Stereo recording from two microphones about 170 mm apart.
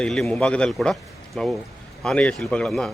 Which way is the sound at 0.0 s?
5° left (ahead or behind).